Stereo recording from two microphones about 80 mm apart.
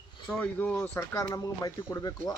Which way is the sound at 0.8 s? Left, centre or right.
Left.